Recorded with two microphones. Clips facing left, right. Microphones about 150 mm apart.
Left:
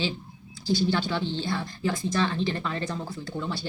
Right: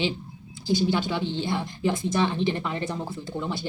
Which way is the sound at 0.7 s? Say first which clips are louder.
Right 1 dB; 15° right (ahead or behind).